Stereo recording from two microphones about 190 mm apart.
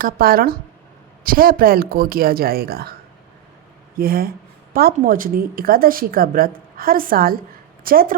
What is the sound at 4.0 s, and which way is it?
A woman's voice, 50° right (ahead or behind).